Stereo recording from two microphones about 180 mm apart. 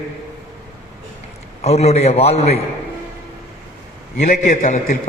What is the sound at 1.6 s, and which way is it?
Speech, 35° left (ahead or behind).